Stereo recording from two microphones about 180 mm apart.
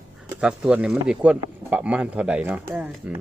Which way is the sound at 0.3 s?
5° right (ahead or behind).